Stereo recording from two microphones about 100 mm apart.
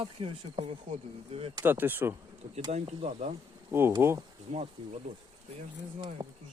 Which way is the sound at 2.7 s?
90° right.